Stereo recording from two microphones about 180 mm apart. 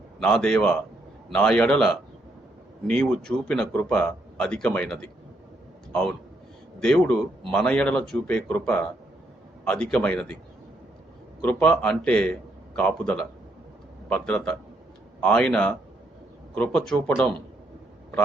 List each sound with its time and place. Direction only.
0.2 s a man's voice: 5° left (ahead or behind)
9.9 s a man's voice: 5° left (ahead or behind)
11.4 s a man's voice: 10° left (ahead or behind)